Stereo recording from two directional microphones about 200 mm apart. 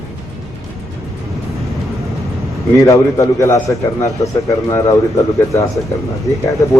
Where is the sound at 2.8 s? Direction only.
15° left (ahead or behind).